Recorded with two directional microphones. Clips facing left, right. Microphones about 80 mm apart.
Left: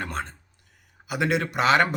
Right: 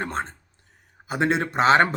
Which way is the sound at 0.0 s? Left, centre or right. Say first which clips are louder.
Right 3 dB; right.